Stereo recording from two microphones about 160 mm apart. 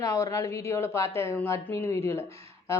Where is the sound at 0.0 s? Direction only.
20° left (ahead or behind).